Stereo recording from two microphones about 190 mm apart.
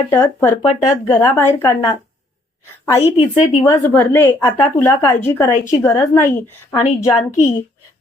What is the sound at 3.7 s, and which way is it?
A woman's voice, 10° left (ahead or behind).